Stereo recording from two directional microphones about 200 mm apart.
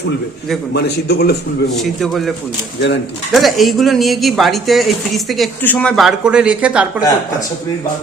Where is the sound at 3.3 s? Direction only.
Centre (ahead or behind).